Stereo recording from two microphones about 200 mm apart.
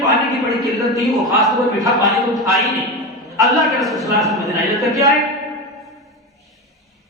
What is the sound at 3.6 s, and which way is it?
Speech, centre (ahead or behind).